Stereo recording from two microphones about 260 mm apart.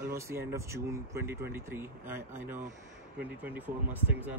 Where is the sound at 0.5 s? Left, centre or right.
Centre.